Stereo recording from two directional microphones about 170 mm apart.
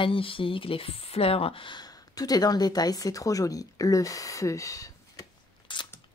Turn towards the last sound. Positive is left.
turn(degrees=30)  # may be behind; listen again after turning